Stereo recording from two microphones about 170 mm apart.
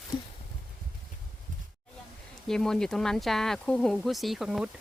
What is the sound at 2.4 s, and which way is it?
Speech, 5° left (ahead or behind).